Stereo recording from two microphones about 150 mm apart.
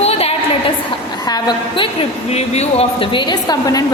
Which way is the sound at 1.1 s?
25° left (ahead or behind).